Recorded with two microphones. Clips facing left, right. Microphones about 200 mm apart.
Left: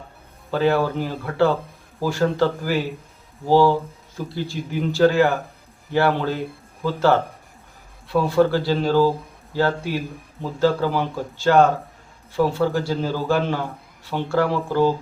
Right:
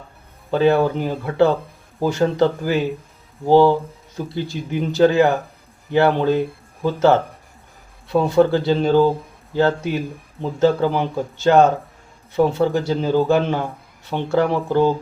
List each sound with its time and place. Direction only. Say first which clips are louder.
0.5 s speech: right 4 dB; 20° right (ahead or behind)